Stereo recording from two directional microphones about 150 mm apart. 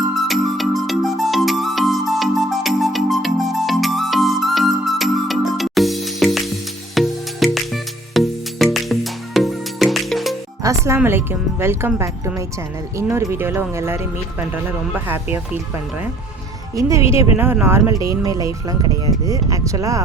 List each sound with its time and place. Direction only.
0.3 s music: centre (ahead or behind)
10.6 s speech: 20° right (ahead or behind)
16.7 s speech: 20° right (ahead or behind)